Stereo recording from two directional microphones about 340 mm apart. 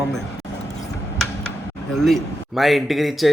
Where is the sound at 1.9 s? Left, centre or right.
Centre.